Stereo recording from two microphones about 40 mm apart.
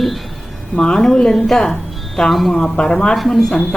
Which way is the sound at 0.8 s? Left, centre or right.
Centre.